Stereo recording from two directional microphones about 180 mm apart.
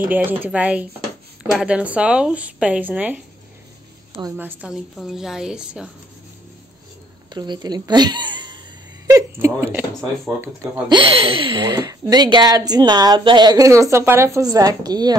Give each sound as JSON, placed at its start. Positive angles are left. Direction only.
{"t": 0.0, "sound": "speech", "side_deg": -10}
{"t": 4.4, "sound": "a woman's voice", "side_deg": -10}
{"t": 7.3, "sound": "speech", "side_deg": -25}
{"t": 9.0, "sound": "a sound", "side_deg": -15}
{"t": 10.9, "sound": "speech", "side_deg": -30}